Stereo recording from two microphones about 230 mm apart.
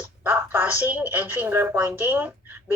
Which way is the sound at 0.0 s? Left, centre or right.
Centre.